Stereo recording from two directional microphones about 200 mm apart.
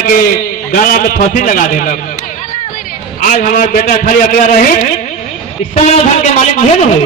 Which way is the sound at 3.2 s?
40° left (ahead or behind).